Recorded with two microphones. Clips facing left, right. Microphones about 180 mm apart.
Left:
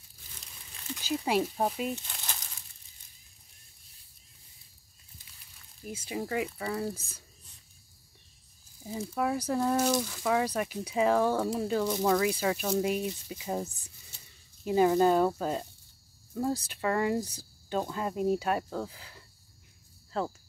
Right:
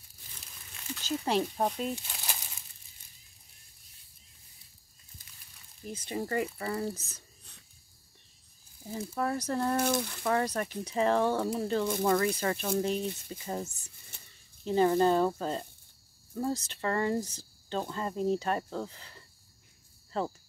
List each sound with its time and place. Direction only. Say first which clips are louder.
1.1 s speech: left 1 dB; 5° left (ahead or behind)
2.0 s a sound: right 1 dB; 10° right (ahead or behind)
5.9 s speech: even; 5° left (ahead or behind)
9.1 s speech: left 2 dB; 10° left (ahead or behind)
14.1 s a sound: right 5 dB; 55° right (ahead or behind)
14.6 s speech: left 1 dB; 10° left (ahead or behind)
20.1 s cricket: even; centre (ahead or behind)